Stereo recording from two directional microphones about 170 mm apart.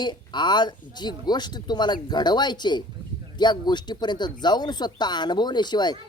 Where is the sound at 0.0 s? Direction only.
25° left (ahead or behind).